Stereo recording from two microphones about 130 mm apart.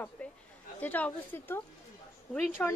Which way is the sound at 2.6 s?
10° left (ahead or behind).